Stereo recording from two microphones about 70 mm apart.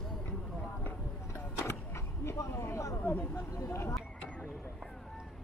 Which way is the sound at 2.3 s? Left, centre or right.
Left.